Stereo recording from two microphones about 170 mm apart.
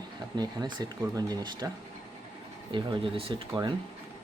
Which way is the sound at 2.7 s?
30° right (ahead or behind).